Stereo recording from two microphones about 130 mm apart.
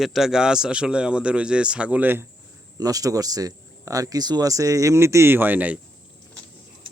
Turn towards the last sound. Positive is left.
turn(degrees=-10)  # may be behind; listen again after turning